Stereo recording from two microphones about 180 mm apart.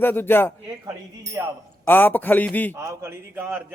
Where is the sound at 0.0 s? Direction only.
10° left (ahead or behind).